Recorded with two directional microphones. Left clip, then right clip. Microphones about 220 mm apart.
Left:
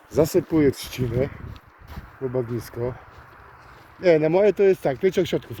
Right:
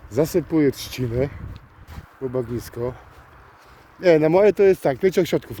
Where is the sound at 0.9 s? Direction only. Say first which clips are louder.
Right 1 dB; 15° right (ahead or behind).